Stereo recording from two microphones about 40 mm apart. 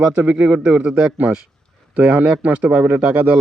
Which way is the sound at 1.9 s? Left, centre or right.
Right.